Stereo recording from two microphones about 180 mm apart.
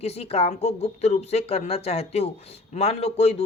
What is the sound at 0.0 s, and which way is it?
Speech, 35° left (ahead or behind).